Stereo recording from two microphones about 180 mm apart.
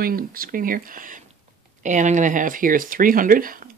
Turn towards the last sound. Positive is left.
turn(degrees=-50)  # may be behind; listen again after turning